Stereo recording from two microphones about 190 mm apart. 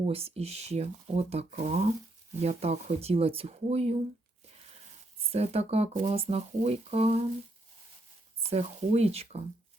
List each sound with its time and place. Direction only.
0.0 s speech: 30° right (ahead or behind)
5.3 s speech: 35° right (ahead or behind)
8.4 s speech: 35° right (ahead or behind)